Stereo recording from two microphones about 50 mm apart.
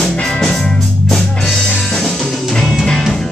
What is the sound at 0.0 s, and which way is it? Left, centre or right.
Music, centre.